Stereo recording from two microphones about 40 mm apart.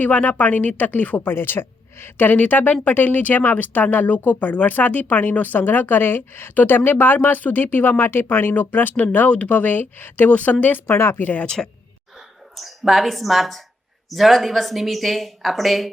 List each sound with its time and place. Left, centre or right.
0.0 s speech: left
1.3 s speech: left
6.5 s speech: left
10.2 s speech: left
10.8 s speech: left
11.2 s speech: left
11.4 s speech: centre
12.5 s speech: centre